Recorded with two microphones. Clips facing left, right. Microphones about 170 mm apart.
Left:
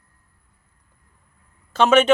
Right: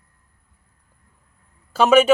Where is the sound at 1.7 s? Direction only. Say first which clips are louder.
Right 1 dB; 10° right (ahead or behind).